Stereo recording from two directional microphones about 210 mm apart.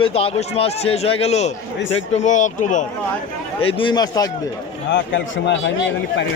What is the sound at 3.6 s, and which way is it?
Speech, 25° left (ahead or behind).